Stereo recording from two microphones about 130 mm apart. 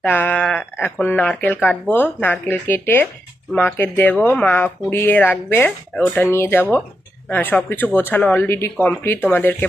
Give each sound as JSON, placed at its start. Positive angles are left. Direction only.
{"t": 0.0, "sound": "speech", "side_deg": 15}